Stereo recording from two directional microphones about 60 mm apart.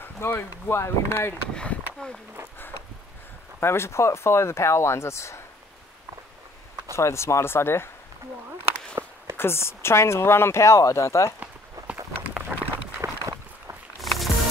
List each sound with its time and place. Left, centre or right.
0.0 s speech: left
1.5 s speech: centre
3.5 s speech: left
7.0 s speech: left
9.0 s a sound: right
9.4 s speech: left
12.2 s a sound: right
13.9 s music: centre